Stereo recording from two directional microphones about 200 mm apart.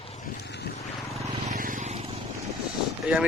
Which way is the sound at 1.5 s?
40° right (ahead or behind).